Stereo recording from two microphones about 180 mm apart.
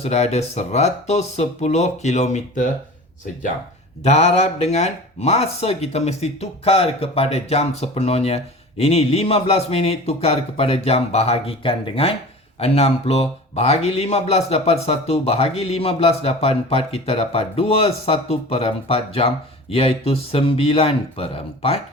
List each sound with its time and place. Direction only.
0.0 s a man's voice: 40° left (ahead or behind)
4.0 s a man's voice: 35° left (ahead or behind)